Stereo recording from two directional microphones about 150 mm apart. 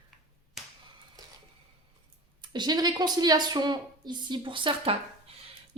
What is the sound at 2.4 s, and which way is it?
A woman's voice, 30° right (ahead or behind).